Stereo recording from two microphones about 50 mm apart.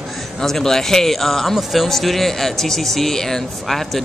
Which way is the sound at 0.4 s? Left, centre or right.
Centre.